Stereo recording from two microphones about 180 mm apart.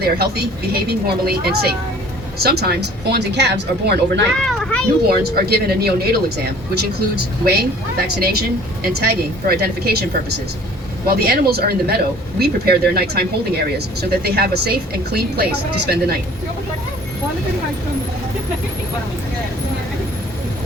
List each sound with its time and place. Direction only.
0.0 s a woman's voice: 60° right (ahead or behind)
4.4 s children playing: centre (ahead or behind)
5.0 s a woman's voice: 60° right (ahead or behind)